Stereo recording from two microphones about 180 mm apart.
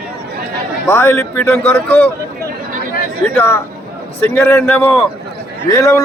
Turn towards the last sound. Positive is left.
turn(degrees=15)  # may be behind; listen again after turning